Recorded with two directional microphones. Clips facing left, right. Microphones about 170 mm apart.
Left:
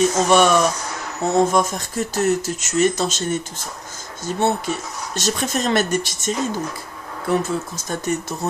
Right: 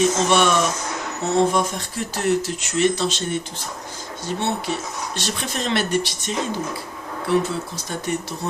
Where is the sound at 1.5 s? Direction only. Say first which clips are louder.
Left 3 dB; 45° left (ahead or behind).